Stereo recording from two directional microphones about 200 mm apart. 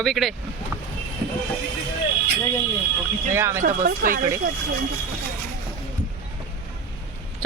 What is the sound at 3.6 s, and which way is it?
Speech, 45° right (ahead or behind).